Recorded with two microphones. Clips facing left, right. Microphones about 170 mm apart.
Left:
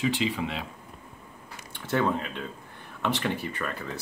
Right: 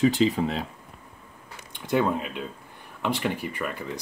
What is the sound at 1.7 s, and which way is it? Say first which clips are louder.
Speech: right 2 dB; 15° right (ahead or behind).